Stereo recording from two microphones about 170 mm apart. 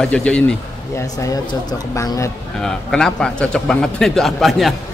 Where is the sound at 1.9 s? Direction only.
20° left (ahead or behind).